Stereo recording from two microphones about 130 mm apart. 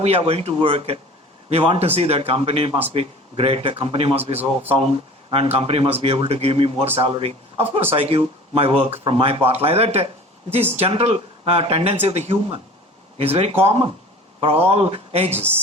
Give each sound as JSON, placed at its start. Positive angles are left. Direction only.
{"t": 0.0, "sound": "a man's voice", "side_deg": -50}
{"t": 5.3, "sound": "a man's voice", "side_deg": -50}